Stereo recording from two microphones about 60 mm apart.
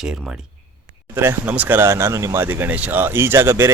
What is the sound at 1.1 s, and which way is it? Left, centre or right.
Speech, right.